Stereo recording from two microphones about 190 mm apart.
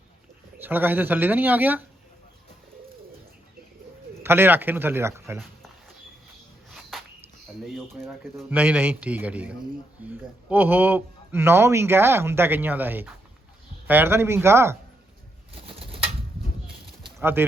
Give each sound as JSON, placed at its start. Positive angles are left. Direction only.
{"t": 0.6, "sound": "speech", "side_deg": -10}
{"t": 4.2, "sound": "speech", "side_deg": -10}
{"t": 6.7, "sound": "a sound", "side_deg": 0}
{"t": 7.6, "sound": "speech", "side_deg": 0}
{"t": 15.5, "sound": "pigeon", "side_deg": -30}
{"t": 17.2, "sound": "speech", "side_deg": -10}